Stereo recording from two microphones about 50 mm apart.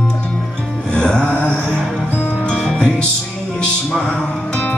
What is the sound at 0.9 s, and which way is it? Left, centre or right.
Music, centre.